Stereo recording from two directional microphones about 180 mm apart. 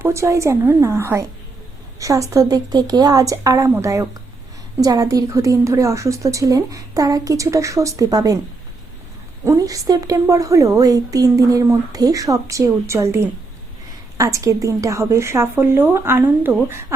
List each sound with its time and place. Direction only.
0.0 s a woman's voice: 15° right (ahead or behind)
9.4 s a woman's voice: 15° right (ahead or behind)